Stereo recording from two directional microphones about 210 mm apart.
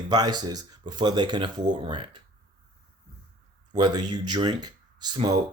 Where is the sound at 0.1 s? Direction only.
20° right (ahead or behind).